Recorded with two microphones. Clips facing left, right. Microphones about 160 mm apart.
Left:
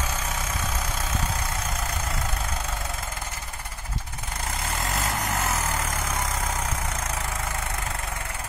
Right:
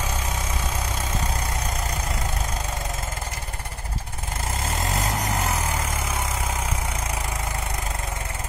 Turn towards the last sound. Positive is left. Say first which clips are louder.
# right 1 dB
turn(degrees=-10)  # may be behind; listen again after turning